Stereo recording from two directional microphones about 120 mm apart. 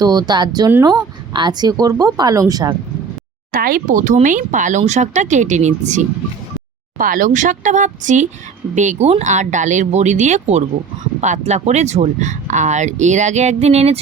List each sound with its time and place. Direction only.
0.0 s speech: 35° right (ahead or behind)
3.8 s speech: 90° right
7.2 s speech: 90° right; by 14.0 s 60° right (ahead or behind)